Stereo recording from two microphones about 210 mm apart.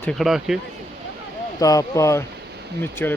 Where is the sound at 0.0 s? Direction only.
Centre (ahead or behind).